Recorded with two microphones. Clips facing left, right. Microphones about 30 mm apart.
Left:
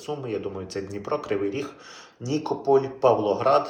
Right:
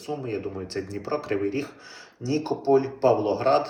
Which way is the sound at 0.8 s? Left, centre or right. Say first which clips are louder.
Even; right.